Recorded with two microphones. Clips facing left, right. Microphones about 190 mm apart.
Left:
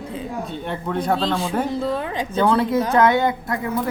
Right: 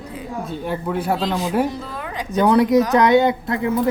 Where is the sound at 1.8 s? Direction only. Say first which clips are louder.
Left 6 dB; 30° left (ahead or behind).